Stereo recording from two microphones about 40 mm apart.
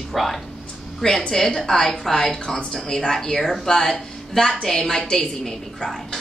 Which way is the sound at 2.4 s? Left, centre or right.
Centre.